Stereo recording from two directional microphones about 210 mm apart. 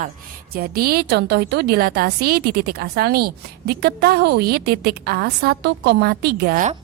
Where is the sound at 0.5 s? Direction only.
45° right (ahead or behind).